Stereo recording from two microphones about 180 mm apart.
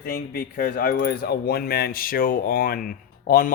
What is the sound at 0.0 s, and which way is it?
Speech, 60° left (ahead or behind).